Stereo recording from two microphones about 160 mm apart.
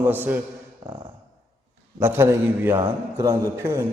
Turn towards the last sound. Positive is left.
turn(degrees=-20)  # may be behind; listen again after turning